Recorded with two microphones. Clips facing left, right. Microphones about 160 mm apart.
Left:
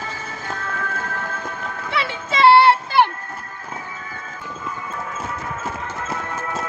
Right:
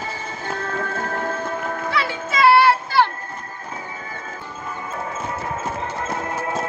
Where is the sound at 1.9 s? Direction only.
25° left (ahead or behind).